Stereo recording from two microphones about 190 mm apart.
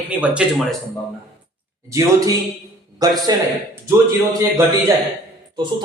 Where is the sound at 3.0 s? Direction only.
20° right (ahead or behind).